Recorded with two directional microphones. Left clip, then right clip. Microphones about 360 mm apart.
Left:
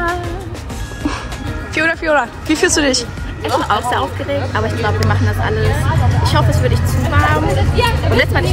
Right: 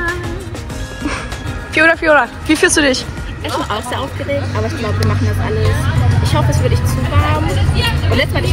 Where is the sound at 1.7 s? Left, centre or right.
Centre.